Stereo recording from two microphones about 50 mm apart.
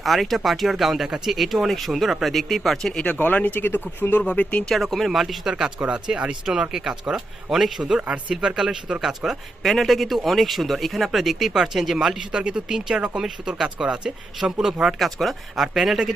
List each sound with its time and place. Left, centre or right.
0.0 s speech: centre
2.9 s speech: left
3.2 s speech: left
4.7 s speech: centre
8.0 s speech: right; by 16.1 s centre